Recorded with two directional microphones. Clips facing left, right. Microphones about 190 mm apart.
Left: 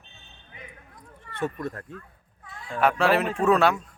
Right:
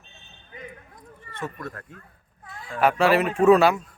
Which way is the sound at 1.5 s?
20° left (ahead or behind).